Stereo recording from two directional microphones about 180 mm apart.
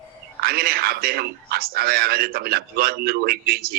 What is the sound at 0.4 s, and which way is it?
A man's voice, 55° right (ahead or behind).